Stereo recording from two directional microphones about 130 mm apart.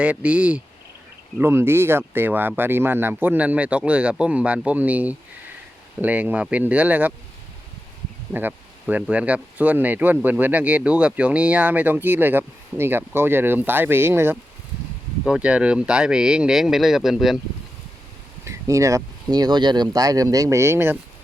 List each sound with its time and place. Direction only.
0.0 s speech: 10° right (ahead or behind)
8.3 s speech: 15° right (ahead or behind)
18.4 s speech: 25° right (ahead or behind)